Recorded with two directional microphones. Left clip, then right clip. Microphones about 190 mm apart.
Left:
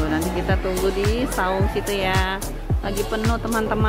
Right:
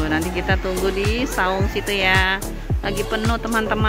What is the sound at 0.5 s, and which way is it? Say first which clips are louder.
Speech: right 2 dB; 10° right (ahead or behind).